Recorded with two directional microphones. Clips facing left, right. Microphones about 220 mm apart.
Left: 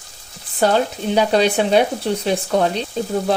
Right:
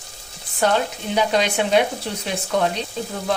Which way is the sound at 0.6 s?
35° left (ahead or behind).